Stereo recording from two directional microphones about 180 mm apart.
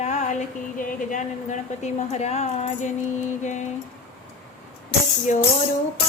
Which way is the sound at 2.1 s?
35° left (ahead or behind).